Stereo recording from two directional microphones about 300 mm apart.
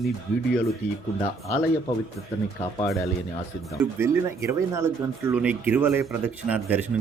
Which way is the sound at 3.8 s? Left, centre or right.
Centre.